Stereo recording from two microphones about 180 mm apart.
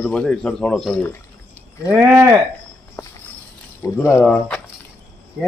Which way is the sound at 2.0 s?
15° right (ahead or behind).